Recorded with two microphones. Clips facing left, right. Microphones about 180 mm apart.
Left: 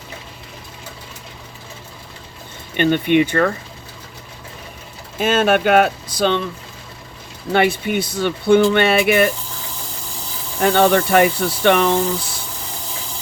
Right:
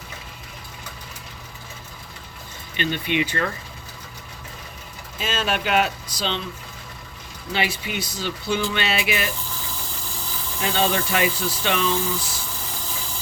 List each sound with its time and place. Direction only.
2.7 s speech: 55° left (ahead or behind)
5.1 s speech: 50° left (ahead or behind)
7.5 s speech: 55° left (ahead or behind)
10.6 s speech: 60° left (ahead or behind)